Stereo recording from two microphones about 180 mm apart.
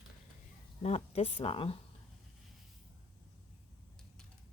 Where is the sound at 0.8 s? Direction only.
35° left (ahead or behind).